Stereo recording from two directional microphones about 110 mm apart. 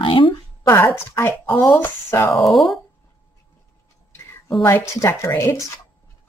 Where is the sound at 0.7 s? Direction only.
25° left (ahead or behind).